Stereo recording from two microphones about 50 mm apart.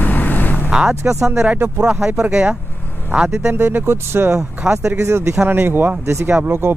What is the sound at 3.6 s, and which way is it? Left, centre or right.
Speech, right.